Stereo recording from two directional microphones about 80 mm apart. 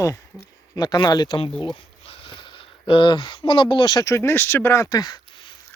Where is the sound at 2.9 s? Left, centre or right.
Left.